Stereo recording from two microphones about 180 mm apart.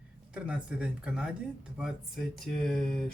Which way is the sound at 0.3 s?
5° right (ahead or behind).